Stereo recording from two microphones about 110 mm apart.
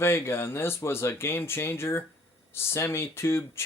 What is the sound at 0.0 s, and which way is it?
Speech, 20° left (ahead or behind).